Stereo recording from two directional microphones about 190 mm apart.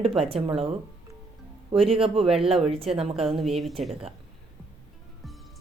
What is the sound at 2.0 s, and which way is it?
Speech, 30° right (ahead or behind).